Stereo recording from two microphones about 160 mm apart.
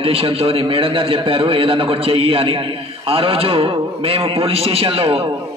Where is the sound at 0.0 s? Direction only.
35° right (ahead or behind).